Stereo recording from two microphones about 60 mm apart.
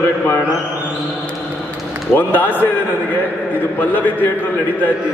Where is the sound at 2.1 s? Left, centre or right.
Left.